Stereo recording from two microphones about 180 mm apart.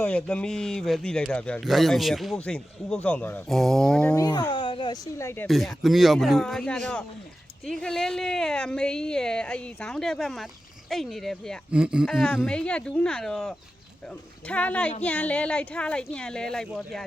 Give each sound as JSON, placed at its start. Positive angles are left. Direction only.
{"t": 0.0, "sound": "speech", "side_deg": 5}
{"t": 4.1, "sound": "a woman's voice", "side_deg": 20}
{"t": 5.1, "sound": "speech", "side_deg": 15}
{"t": 5.5, "sound": "speech", "side_deg": 0}